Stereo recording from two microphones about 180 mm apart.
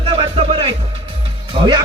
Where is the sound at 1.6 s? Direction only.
30° right (ahead or behind).